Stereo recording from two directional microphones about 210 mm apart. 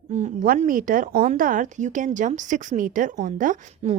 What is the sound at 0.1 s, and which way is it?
Speech, 40° right (ahead or behind).